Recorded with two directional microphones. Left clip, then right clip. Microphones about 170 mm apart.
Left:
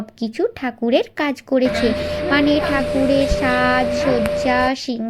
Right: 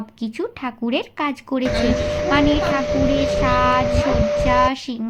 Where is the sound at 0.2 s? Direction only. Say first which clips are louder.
Left 5 dB; 15° left (ahead or behind).